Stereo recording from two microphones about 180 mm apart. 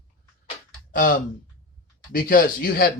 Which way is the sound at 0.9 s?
55° left (ahead or behind).